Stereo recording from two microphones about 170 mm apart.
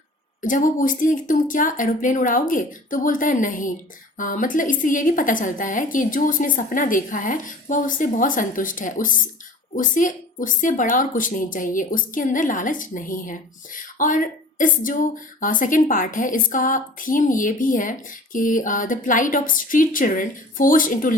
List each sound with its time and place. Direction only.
0.4 s a woman's voice: 50° left (ahead or behind)